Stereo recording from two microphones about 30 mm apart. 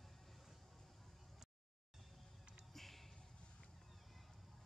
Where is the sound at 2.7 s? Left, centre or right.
Centre.